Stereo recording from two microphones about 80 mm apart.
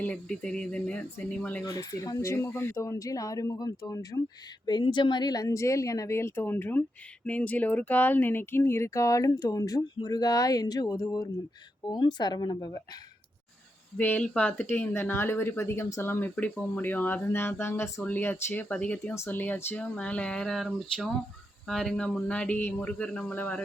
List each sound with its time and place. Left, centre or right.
0.0 s speech: centre
1.6 s a woman's voice: left
4.6 s a woman's voice: left
11.9 s speech: left
14.0 s speech: centre; by 16.1 s left
16.2 s speech: centre; by 18.0 s left
18.0 s speech: left
19.1 s speech: left